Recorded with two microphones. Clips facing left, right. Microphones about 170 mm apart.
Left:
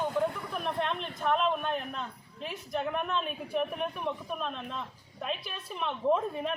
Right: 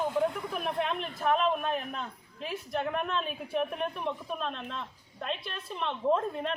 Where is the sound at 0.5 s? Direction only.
5° right (ahead or behind).